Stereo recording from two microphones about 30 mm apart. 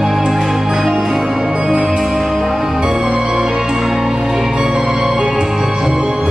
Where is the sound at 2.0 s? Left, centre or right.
Centre.